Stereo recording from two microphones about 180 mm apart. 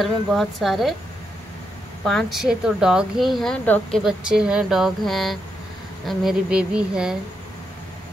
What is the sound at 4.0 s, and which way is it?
A woman's voice, 5° right (ahead or behind).